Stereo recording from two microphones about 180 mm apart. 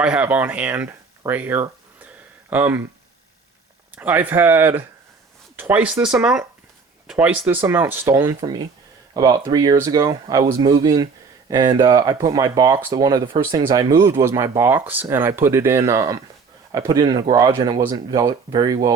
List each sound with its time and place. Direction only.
0.0 s speech: 5° right (ahead or behind)
3.9 s speech: 10° right (ahead or behind)